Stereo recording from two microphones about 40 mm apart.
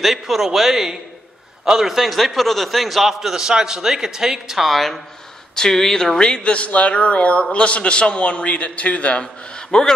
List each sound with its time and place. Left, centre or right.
0.0 s a man's voice: centre
5.6 s speech: centre
6.6 s a man's voice: left
9.2 s a man's voice: centre